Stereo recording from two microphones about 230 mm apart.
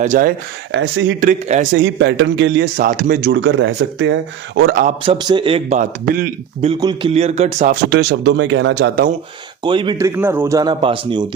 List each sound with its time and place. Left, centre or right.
0.0 s a man's voice: right
0.7 s speech: right
1.2 s a man's voice: right
1.8 s speech: right
5.0 s speech: centre; by 6.7 s right
6.7 s speech: centre
7.9 s speech: right
9.6 s speech: centre